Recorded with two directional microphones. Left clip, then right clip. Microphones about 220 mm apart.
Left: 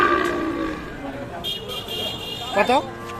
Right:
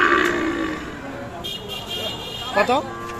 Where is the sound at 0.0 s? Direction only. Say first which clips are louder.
Right 2 dB; 40° right (ahead or behind).